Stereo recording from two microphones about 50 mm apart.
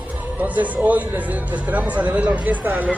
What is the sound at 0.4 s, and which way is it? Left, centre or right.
Speech, right.